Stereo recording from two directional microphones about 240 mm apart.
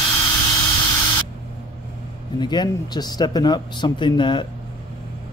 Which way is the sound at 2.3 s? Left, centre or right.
Centre.